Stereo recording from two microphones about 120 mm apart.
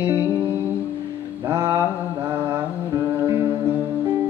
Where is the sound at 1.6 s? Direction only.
35° right (ahead or behind).